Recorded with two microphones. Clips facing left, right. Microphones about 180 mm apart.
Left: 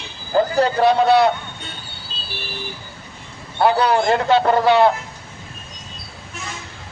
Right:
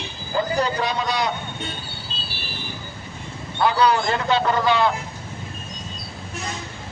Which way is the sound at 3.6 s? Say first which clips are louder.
Left 3 dB; 55° left (ahead or behind).